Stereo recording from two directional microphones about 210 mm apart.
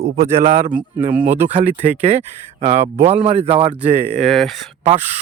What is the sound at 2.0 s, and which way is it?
Speech, 30° right (ahead or behind).